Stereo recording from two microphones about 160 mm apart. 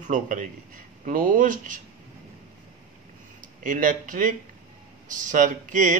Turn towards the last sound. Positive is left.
turn(degrees=-50)  # may be behind; listen again after turning